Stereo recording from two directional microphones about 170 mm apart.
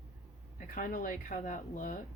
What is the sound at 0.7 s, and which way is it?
Speech, 50° left (ahead or behind).